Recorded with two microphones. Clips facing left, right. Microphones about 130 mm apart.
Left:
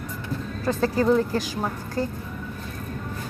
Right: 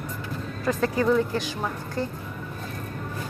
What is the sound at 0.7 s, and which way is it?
Speech, 30° left (ahead or behind).